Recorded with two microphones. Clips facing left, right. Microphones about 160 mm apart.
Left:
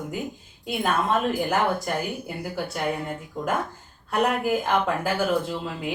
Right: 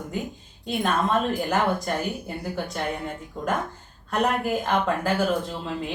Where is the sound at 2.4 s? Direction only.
5° left (ahead or behind).